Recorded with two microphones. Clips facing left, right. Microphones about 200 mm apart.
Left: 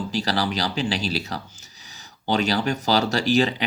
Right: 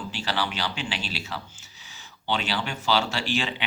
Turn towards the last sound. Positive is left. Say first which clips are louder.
# left 8 dB
turn(degrees=40)  # may be behind; listen again after turning